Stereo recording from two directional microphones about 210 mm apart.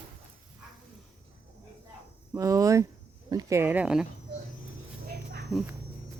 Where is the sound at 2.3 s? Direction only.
15° right (ahead or behind).